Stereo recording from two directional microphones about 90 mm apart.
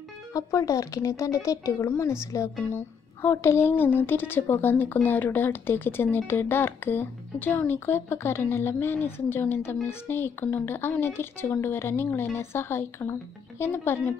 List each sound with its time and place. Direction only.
0.3 s a woman's voice: 35° left (ahead or behind)